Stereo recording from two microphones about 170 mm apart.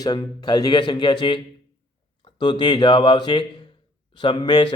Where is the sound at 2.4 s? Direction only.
25° left (ahead or behind).